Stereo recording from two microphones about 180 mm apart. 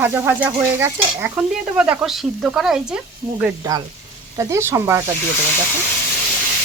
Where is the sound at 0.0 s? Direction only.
10° right (ahead or behind).